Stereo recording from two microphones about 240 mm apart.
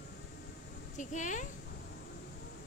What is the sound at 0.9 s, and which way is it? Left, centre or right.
Speech, left.